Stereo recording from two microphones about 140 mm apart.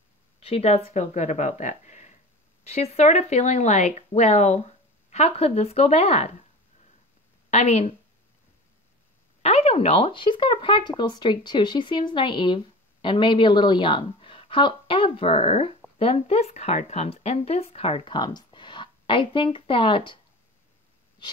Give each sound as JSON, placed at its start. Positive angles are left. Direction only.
{"t": 0.4, "sound": "speech", "side_deg": 45}
{"t": 7.5, "sound": "speech", "side_deg": 50}
{"t": 9.4, "sound": "speech", "side_deg": 45}